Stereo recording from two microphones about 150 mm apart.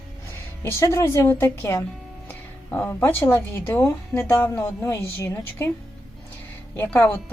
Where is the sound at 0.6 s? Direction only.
20° left (ahead or behind).